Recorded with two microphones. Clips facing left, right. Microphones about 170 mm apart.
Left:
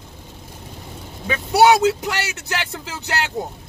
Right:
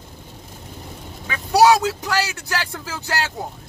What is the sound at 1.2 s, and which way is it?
A man's voice, 20° left (ahead or behind).